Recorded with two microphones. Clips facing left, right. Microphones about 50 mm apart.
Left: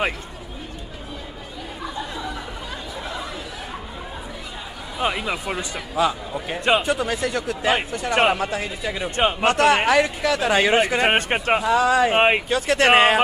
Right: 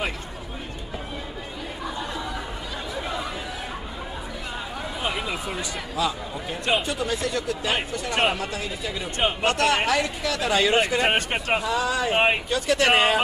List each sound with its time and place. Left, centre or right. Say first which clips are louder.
5.3 s speech: left 3 dB; left
11.6 s speech: left 7 dB; left